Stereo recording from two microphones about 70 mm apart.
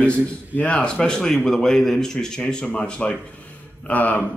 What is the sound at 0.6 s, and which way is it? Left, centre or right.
Speech, centre.